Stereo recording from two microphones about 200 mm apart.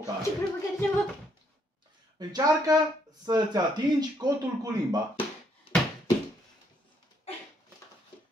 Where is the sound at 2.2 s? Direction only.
20° right (ahead or behind).